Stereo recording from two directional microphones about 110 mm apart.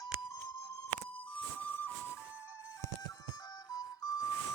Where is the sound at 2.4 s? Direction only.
25° left (ahead or behind).